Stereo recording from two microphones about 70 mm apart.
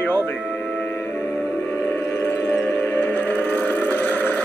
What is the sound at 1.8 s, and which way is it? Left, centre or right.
Music, left.